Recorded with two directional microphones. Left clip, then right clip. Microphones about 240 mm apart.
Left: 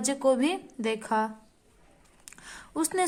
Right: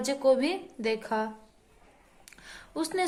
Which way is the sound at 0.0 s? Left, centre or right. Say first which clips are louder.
Even; left.